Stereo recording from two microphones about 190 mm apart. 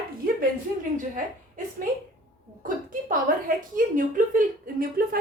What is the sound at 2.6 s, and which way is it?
A woman's voice, 45° right (ahead or behind).